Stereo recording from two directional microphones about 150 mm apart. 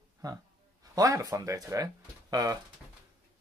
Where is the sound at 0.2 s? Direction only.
25° right (ahead or behind).